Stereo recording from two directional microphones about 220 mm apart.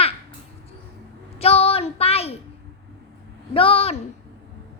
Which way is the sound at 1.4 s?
25° left (ahead or behind).